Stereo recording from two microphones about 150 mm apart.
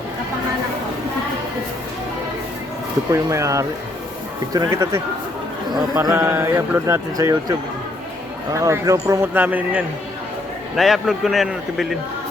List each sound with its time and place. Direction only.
3.1 s speech: 20° right (ahead or behind)
8.5 s speech: 20° right (ahead or behind)
10.8 s a man's voice: centre (ahead or behind)